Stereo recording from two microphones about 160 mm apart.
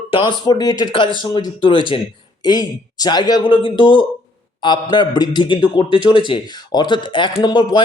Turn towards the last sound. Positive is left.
turn(degrees=25)  # may be behind; listen again after turning